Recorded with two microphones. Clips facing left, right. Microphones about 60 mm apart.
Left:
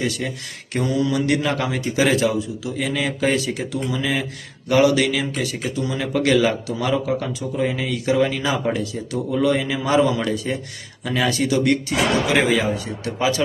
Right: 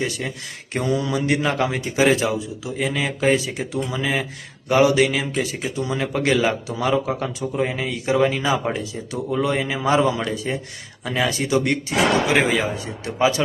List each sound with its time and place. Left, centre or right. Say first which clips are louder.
0.3 s speech: left 1 dB; right